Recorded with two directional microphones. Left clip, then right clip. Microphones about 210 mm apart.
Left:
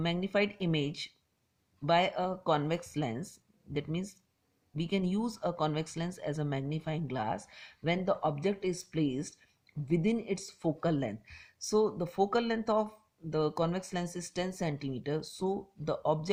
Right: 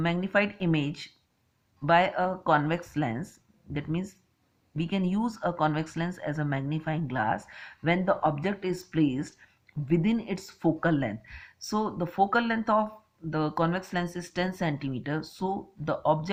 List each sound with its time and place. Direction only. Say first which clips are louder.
0.0 s speech: right 4 dB; 40° left (ahead or behind)